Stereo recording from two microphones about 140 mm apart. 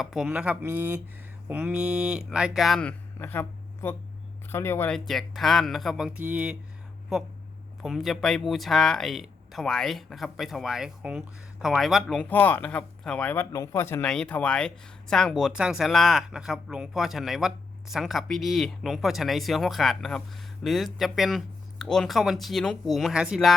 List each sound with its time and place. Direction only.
0.0 s speech: 5° right (ahead or behind)
3.2 s speech: 15° left (ahead or behind)
4.9 s speech: centre (ahead or behind)
7.8 s speech: centre (ahead or behind); by 14.0 s 15° left (ahead or behind)
14.0 s speech: 5° left (ahead or behind)